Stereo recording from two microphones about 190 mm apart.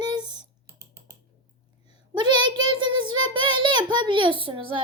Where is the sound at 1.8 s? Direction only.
25° right (ahead or behind).